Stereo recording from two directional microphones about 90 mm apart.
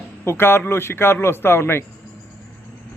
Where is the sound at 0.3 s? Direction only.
25° left (ahead or behind).